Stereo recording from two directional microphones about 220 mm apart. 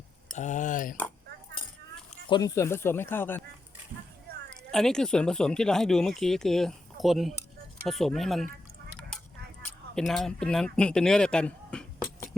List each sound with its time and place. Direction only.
0.3 s speech: 35° left (ahead or behind)
2.3 s speech: 15° left (ahead or behind)
4.4 s speech: 5° left (ahead or behind)
9.9 s speech: centre (ahead or behind)